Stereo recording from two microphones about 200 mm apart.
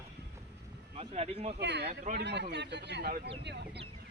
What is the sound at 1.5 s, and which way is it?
Speech, 60° right (ahead or behind).